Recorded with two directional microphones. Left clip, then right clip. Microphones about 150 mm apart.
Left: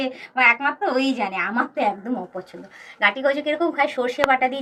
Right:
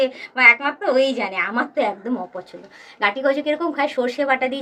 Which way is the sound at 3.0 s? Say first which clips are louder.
Even; 30° right (ahead or behind).